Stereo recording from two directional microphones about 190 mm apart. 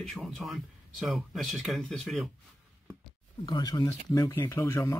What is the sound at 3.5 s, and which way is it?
Speech, 20° left (ahead or behind).